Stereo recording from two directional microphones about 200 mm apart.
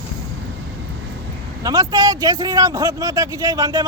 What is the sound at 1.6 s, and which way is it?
Speech, 20° right (ahead or behind).